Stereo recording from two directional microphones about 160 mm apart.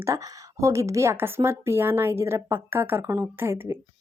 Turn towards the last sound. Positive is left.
turn(degrees=-15)  # may be behind; listen again after turning